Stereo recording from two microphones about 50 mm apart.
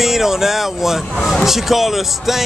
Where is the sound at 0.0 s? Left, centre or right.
Centre.